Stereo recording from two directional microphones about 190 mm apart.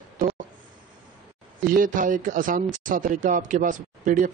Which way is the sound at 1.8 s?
45° right (ahead or behind).